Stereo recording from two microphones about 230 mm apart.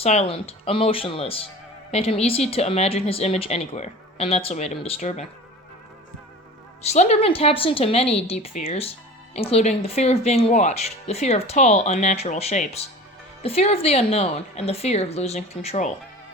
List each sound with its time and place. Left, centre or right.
0.0 s speech: left
6.9 s speech: left